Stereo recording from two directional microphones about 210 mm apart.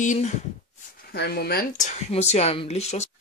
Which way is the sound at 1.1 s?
50° left (ahead or behind).